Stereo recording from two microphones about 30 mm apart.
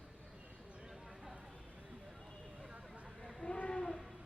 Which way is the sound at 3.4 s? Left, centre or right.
Left.